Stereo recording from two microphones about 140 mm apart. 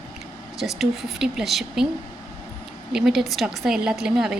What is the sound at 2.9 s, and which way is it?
Speech, centre (ahead or behind).